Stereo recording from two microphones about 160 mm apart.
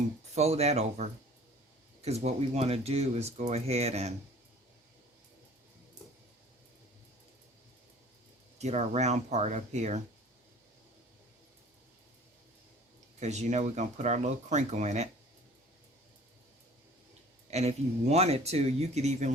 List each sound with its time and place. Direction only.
0.3 s speech: 40° right (ahead or behind)
8.5 s speech: 45° right (ahead or behind)
13.1 s speech: 45° right (ahead or behind)
17.5 s speech: 40° right (ahead or behind)